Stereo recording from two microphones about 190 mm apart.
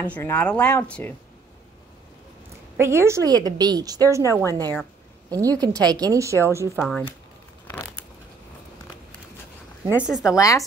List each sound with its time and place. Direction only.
0.0 s speech: 10° left (ahead or behind)
2.8 s a woman's voice: 15° right (ahead or behind)
4.2 s speech: 15° left (ahead or behind)
5.3 s a woman's voice: 20° right (ahead or behind)
6.8 s a woman's voice: centre (ahead or behind)
7.6 s a sound: 10° left (ahead or behind)
9.8 s a woman's voice: 5° right (ahead or behind)
10.3 s speech: 15° left (ahead or behind)